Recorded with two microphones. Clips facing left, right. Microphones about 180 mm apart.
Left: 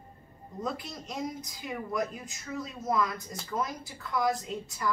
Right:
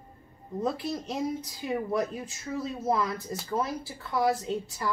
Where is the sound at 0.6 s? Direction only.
30° right (ahead or behind).